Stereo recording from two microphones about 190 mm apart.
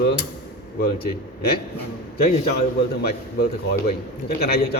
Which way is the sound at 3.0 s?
55° left (ahead or behind).